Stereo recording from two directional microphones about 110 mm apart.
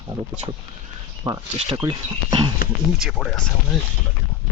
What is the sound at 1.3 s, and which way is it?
Speech, 40° right (ahead or behind).